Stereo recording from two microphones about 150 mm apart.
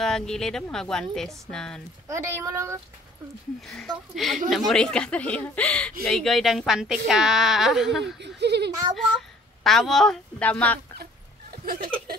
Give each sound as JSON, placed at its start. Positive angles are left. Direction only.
{"t": 0.0, "sound": "a woman's voice", "side_deg": 5}
{"t": 2.0, "sound": "a child's voice", "side_deg": -20}
{"t": 3.6, "sound": "a woman's voice", "side_deg": 0}
{"t": 8.4, "sound": "a child's voice", "side_deg": -90}
{"t": 9.6, "sound": "a woman's voice", "side_deg": 0}
{"t": 11.5, "sound": "chuckle", "side_deg": -75}